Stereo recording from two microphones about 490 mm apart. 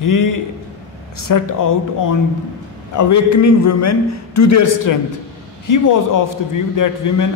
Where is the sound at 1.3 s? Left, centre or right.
Left.